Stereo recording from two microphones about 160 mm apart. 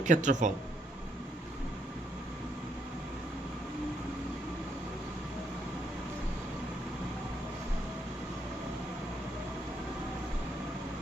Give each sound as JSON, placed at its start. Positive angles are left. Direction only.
{"t": 0.0, "sound": "speech", "side_deg": -50}